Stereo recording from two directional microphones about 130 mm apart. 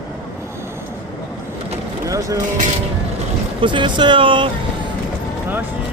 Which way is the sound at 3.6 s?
40° right (ahead or behind).